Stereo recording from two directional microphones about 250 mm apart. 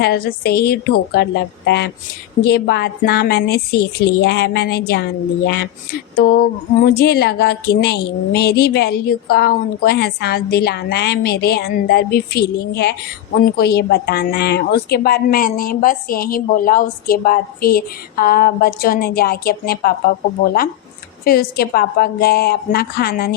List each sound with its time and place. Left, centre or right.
0.0 s a woman's voice: left